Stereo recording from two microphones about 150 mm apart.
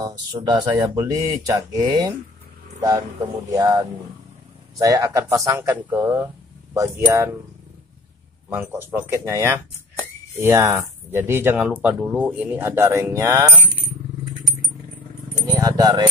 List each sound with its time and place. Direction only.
0.0 s speech: 30° right (ahead or behind)
3.5 s speech: 25° right (ahead or behind)
8.5 s speech: 15° right (ahead or behind)
15.4 s speech: 25° right (ahead or behind)